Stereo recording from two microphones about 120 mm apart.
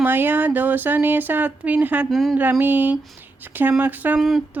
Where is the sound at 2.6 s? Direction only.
15° right (ahead or behind).